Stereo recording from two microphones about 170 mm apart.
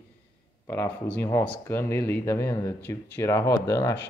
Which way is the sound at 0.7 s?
10° left (ahead or behind).